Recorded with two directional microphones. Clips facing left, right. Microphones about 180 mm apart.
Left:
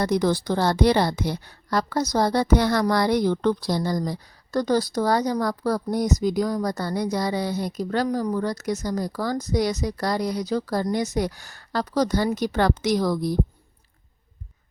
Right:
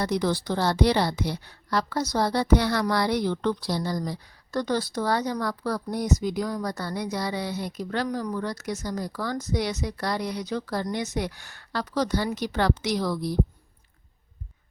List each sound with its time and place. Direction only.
0.0 s a woman's voice: 45° left (ahead or behind)